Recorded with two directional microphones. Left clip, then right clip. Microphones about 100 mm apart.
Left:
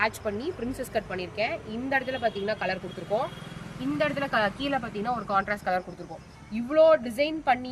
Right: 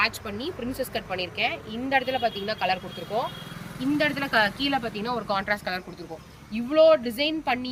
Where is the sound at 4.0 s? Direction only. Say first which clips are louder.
Right 2 dB; 20° left (ahead or behind).